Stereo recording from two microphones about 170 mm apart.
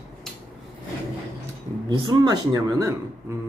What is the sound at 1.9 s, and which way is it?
Speech, 20° right (ahead or behind).